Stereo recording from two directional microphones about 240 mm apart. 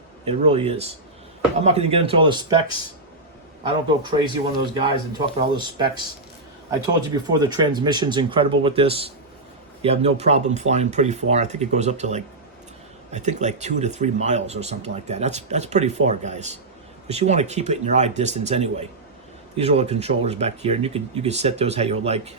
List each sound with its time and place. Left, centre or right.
0.3 s speech: right
4.0 s speech: centre
7.3 s speech: centre